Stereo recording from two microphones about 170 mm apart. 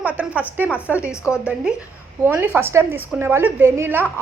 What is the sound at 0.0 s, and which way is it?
A woman's voice, 10° right (ahead or behind).